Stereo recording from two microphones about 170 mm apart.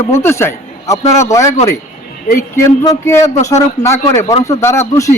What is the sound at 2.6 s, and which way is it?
A man's voice, 15° left (ahead or behind).